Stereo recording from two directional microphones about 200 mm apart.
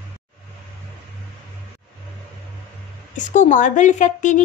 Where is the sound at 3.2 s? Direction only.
35° left (ahead or behind).